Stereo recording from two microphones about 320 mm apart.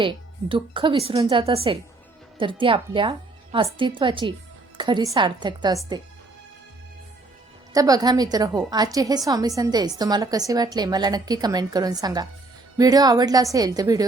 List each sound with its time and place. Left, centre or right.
0.0 s a woman's voice: centre
7.7 s a woman's voice: centre